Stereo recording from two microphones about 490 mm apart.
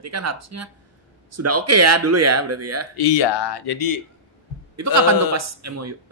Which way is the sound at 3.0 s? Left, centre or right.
Left.